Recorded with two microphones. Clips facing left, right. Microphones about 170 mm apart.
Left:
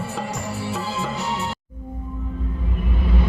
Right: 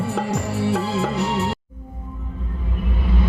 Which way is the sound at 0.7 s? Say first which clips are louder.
Right 5 dB; 65° right (ahead or behind).